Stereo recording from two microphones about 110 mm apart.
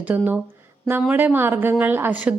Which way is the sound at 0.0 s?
15° right (ahead or behind).